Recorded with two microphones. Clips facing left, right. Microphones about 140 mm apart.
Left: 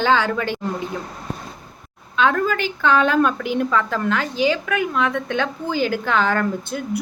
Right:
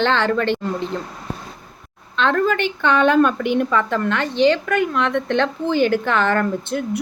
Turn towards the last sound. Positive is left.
turn(degrees=5)  # may be behind; listen again after turning